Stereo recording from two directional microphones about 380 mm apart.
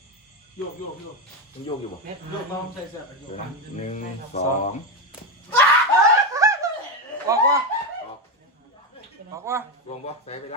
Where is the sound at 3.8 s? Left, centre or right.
Centre.